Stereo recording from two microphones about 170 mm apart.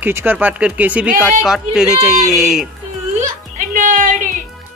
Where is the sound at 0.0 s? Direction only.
10° right (ahead or behind).